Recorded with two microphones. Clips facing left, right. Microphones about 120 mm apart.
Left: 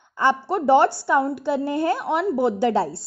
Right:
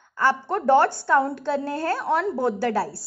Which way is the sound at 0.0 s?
20° left (ahead or behind).